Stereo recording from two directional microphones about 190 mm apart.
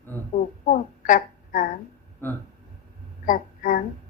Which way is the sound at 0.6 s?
45° left (ahead or behind).